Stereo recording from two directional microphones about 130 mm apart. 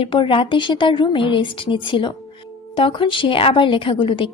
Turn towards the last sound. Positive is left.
turn(degrees=40)  # may be behind; listen again after turning